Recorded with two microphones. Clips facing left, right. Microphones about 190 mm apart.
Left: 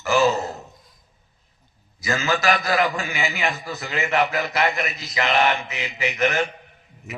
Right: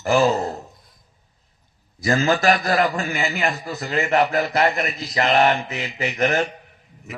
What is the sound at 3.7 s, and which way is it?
A man's voice, 35° right (ahead or behind).